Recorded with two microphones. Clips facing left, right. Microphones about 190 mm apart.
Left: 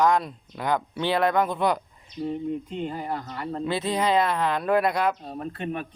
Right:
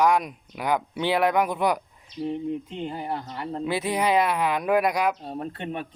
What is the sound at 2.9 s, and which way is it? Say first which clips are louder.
Speech: even; 20° right (ahead or behind).